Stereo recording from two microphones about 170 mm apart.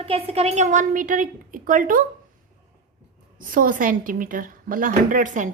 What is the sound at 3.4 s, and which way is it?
A woman's voice, 55° right (ahead or behind).